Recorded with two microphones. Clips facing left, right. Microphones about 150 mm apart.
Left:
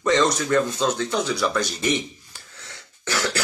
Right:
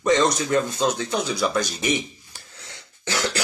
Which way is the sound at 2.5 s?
20° right (ahead or behind).